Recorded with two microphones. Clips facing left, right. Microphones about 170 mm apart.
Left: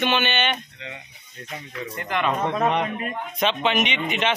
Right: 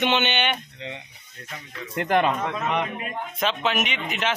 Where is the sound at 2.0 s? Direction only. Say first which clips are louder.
Right 7 dB; 80° right.